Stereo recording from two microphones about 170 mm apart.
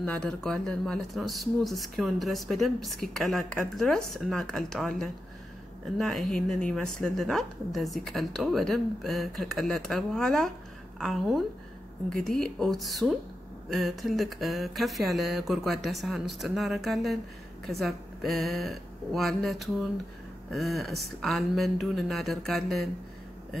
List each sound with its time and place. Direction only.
0.0 s speech: 5° left (ahead or behind)